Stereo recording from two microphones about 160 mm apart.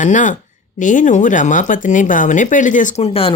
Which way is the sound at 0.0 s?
50° left (ahead or behind).